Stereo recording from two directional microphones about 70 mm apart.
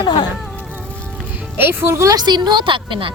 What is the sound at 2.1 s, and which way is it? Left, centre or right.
Speech, right.